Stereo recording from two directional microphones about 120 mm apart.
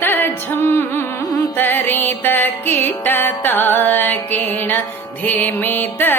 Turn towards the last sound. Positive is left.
turn(degrees=15)  # may be behind; listen again after turning